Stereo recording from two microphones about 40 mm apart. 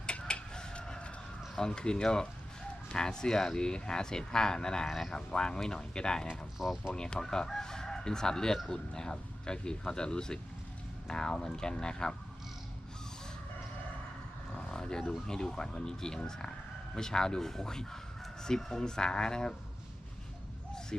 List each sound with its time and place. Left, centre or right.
0.0 s chicken: left
1.5 s speech: centre
5.1 s speech: left
6.6 s speech: centre
6.9 s speech: centre
14.7 s roaring cats: centre
15.3 s speech: centre